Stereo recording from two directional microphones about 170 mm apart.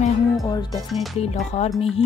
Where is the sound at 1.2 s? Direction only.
40° left (ahead or behind).